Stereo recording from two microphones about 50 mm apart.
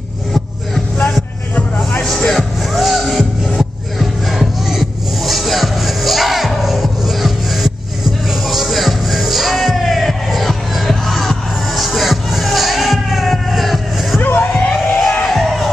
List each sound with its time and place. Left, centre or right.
2.0 s music: centre
14.2 s music: left
15.2 s crowd: centre